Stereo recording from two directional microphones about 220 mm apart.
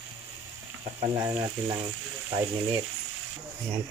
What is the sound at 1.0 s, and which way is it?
Frying, 20° right (ahead or behind).